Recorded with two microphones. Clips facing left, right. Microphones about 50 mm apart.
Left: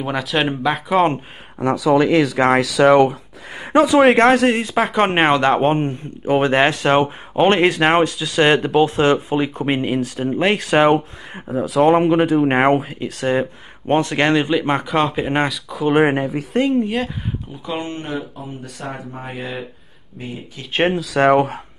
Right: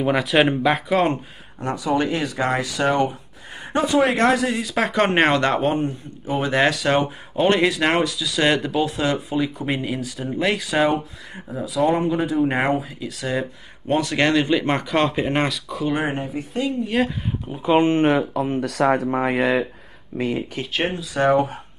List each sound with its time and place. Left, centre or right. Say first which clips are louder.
0.0 s speech: right 2 dB; centre
1.6 s speech: left 7 dB; left
4.0 s speech: left 5 dB; left
4.7 s speech: left 2 dB; centre
5.6 s speech: left 4 dB; left
11.4 s speech: left 6 dB; left
12.5 s speech: left 6 dB; left
14.4 s speech: left 2 dB; centre
15.9 s speech: left 10 dB; left
17.5 s speech: right 12 dB; right
18.0 s speech: right 9 dB; right
20.8 s speech: left 6 dB; left